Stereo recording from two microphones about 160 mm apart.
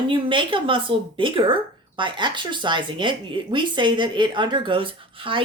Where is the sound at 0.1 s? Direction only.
30° right (ahead or behind).